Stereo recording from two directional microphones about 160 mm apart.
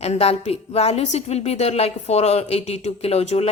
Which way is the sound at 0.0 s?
40° left (ahead or behind).